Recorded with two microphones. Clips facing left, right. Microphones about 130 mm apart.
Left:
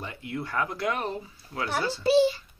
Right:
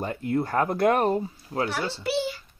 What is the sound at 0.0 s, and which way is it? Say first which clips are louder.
Speech: right 8 dB; 45° right (ahead or behind).